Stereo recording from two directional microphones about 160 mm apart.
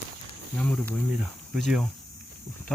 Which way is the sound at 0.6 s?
5° left (ahead or behind).